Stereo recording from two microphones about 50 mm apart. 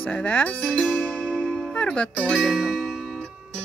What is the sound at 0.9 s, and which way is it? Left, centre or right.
Music, left.